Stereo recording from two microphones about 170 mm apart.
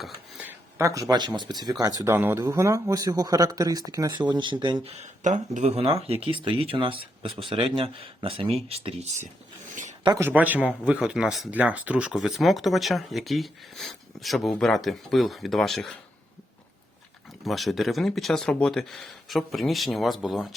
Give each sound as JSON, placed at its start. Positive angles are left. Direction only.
{"t": 0.4, "sound": "speech", "side_deg": -15}
{"t": 2.0, "sound": "speech", "side_deg": -15}
{"t": 10.2, "sound": "speech", "side_deg": -10}
{"t": 17.4, "sound": "speech", "side_deg": 0}